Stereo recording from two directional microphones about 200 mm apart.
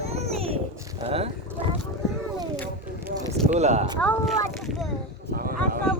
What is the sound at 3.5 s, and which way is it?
Speech, 35° right (ahead or behind).